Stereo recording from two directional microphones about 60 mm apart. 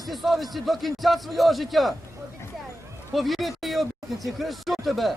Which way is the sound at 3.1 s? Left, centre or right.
Centre.